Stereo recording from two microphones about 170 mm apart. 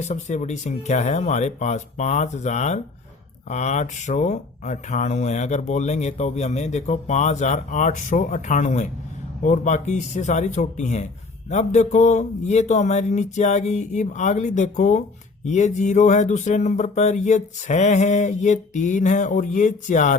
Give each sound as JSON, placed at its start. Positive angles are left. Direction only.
{"t": 0.0, "sound": "speech", "side_deg": 45}